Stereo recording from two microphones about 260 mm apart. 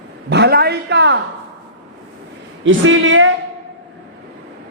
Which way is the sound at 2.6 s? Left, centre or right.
Right.